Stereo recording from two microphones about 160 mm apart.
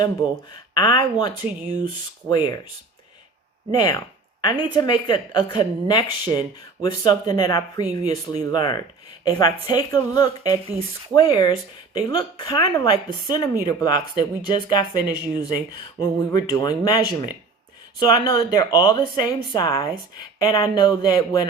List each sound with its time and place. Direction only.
0.0 s speech: 25° left (ahead or behind)
2.3 s speech: 25° left (ahead or behind)
3.8 s speech: 25° left (ahead or behind)